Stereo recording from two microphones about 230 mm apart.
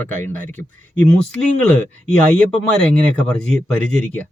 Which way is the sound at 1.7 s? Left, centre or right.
Centre.